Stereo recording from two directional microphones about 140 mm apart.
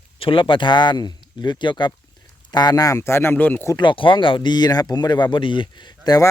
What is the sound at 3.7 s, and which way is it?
Speech, 35° left (ahead or behind).